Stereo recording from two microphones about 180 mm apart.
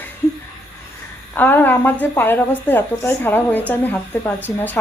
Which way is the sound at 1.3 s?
10° left (ahead or behind).